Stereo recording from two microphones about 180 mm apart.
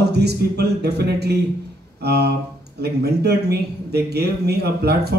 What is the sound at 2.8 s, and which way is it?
A man's voice, 65° right (ahead or behind).